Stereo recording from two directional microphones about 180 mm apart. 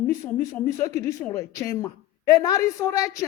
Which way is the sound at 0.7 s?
15° left (ahead or behind).